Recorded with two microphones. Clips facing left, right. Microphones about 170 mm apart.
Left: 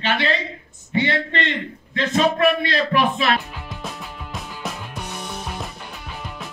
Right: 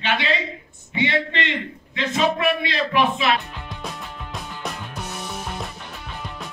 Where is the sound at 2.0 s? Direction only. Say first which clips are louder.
Left 3 dB; 40° left (ahead or behind).